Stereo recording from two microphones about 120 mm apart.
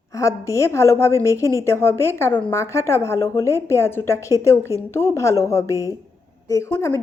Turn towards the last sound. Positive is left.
turn(degrees=20)  # may be behind; listen again after turning